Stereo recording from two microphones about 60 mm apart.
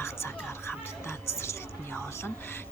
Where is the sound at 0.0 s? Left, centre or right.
Left.